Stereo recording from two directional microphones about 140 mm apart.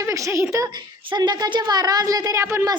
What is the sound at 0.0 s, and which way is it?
A woman's voice, 20° right (ahead or behind).